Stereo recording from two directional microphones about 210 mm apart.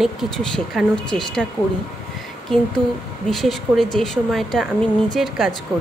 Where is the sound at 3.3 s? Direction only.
Centre (ahead or behind).